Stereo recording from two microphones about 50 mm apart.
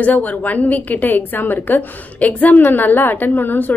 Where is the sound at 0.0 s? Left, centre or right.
Left.